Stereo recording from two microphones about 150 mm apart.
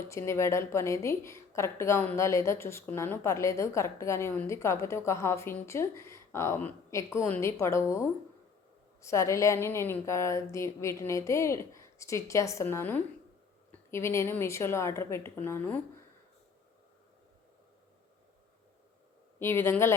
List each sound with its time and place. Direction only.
0.0 s a woman's voice: 20° left (ahead or behind)
19.4 s a woman's voice: 15° left (ahead or behind)